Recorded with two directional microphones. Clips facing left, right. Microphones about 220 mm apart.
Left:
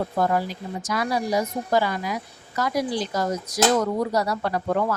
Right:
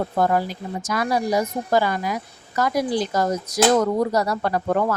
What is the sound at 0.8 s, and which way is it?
Speech, 45° right (ahead or behind).